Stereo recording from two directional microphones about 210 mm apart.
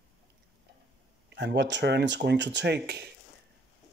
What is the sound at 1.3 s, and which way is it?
Speech, 55° right (ahead or behind).